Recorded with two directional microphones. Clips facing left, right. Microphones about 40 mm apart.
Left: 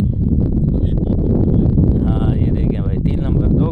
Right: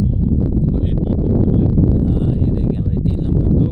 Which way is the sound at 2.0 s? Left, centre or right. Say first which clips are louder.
Even; left.